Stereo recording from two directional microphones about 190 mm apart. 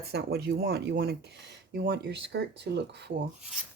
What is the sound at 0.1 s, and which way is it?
Speech, 55° right (ahead or behind).